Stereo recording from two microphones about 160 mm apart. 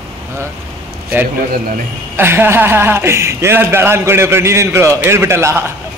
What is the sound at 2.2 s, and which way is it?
A man's voice, 15° right (ahead or behind).